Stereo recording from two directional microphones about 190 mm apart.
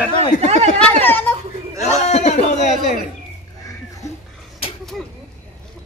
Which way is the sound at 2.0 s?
35° left (ahead or behind).